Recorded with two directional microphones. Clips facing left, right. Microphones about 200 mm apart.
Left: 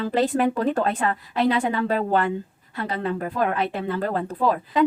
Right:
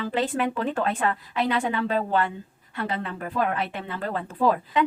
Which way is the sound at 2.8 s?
35° left (ahead or behind).